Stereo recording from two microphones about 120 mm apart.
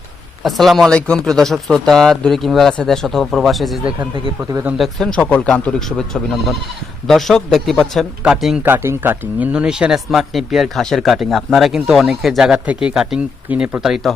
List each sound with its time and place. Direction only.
0.4 s a man's voice: centre (ahead or behind)
4.1 s speech: 30° right (ahead or behind)
4.8 s a man's voice: 5° left (ahead or behind)
8.6 s a man's voice: 20° right (ahead or behind)